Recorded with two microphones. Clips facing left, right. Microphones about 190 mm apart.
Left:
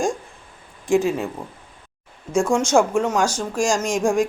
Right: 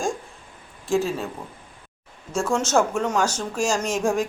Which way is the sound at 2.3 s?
15° left (ahead or behind).